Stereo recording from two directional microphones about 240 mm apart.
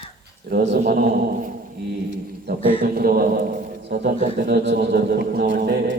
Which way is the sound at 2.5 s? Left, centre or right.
Right.